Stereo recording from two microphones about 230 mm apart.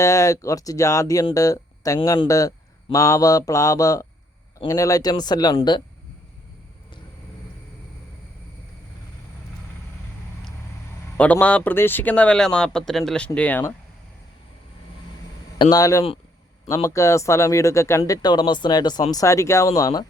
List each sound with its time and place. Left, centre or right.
0.0 s speech: centre
11.2 s speech: centre
15.5 s speech: centre